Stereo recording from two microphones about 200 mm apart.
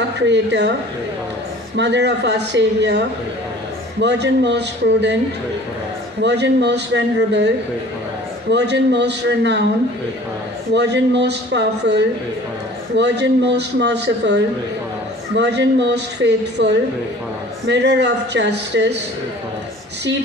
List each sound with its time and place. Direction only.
0.3 s a man's voice: 60° right (ahead or behind)
1.8 s a man's voice: 60° right (ahead or behind)
4.0 s a man's voice: 60° right (ahead or behind)
6.2 s a man's voice: 60° right (ahead or behind)
10.7 s a man's voice: 60° right (ahead or behind)